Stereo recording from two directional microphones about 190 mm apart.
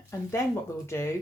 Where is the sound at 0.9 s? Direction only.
15° left (ahead or behind).